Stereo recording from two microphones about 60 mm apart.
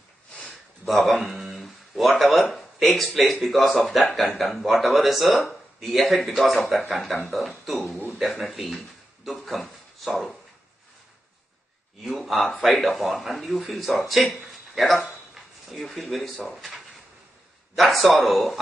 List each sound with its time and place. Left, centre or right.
0.5 s a man's voice: centre
12.0 s a man's voice: centre
17.7 s a man's voice: centre